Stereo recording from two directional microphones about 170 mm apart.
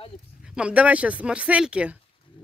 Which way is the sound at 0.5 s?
5° right (ahead or behind).